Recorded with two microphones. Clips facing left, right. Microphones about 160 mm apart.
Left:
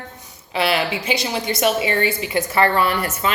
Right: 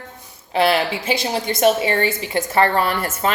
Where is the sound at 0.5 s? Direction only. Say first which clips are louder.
Right 3 dB; 50° right (ahead or behind).